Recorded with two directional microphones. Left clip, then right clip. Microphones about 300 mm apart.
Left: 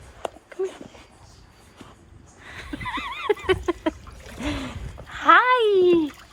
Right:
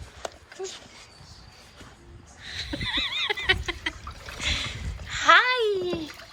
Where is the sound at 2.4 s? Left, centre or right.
Centre.